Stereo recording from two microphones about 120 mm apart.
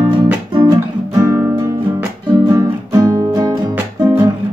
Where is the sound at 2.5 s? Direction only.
30° right (ahead or behind).